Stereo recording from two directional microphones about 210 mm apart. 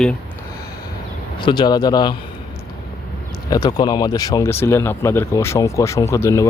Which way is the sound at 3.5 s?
20° left (ahead or behind).